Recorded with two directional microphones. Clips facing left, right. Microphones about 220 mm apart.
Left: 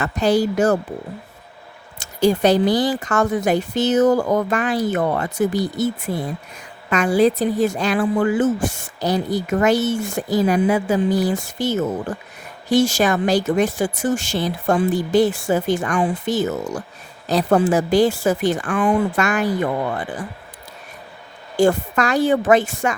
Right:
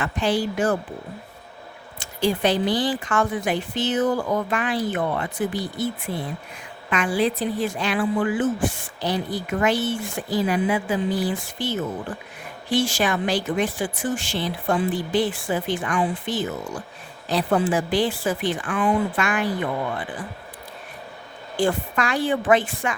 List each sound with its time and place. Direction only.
0.0 s speech: 40° left (ahead or behind)
2.0 s speech: 40° left (ahead or behind)
21.5 s speech: 45° left (ahead or behind)